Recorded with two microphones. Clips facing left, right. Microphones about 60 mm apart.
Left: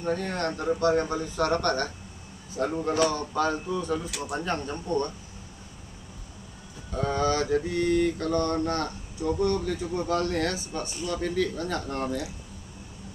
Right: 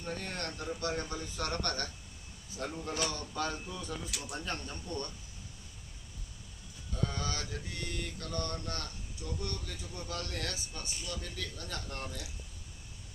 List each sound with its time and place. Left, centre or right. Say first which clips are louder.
0.0 s mantra: left 11 dB; left
6.9 s mantra: left 11 dB; left